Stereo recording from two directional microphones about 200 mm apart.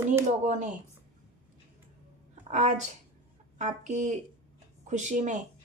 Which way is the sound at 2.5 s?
40° right (ahead or behind).